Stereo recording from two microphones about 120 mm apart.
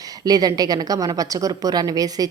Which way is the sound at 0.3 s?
30° right (ahead or behind).